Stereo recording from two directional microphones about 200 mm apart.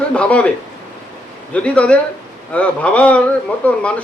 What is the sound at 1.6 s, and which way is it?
A man's voice, 5° left (ahead or behind).